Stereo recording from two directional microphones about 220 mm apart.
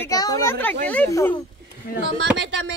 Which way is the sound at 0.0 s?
15° left (ahead or behind).